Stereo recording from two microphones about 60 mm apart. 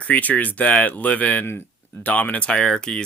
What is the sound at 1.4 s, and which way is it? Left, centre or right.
Speech, left.